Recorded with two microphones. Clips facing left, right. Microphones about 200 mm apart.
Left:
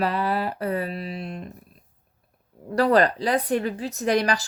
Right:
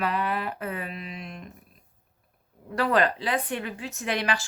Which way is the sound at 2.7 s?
35° left (ahead or behind).